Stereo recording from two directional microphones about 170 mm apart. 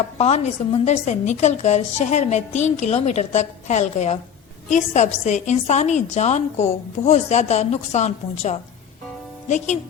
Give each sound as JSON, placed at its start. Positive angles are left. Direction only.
{"t": 0.2, "sound": "a woman's voice", "side_deg": 40}